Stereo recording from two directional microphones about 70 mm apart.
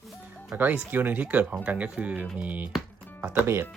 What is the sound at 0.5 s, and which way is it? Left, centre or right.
Speech, right.